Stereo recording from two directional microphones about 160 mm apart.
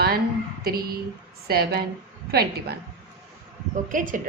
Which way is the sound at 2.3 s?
85° right.